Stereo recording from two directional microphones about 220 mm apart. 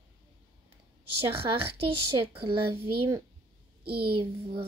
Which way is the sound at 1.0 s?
90° right.